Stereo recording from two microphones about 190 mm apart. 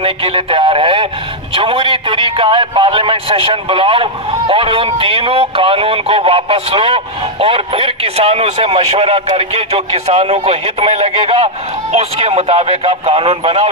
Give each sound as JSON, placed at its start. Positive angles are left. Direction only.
{"t": 0.0, "sound": "a man's voice", "side_deg": -30}